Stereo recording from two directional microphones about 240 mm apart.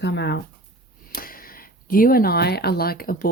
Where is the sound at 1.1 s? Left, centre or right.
Left.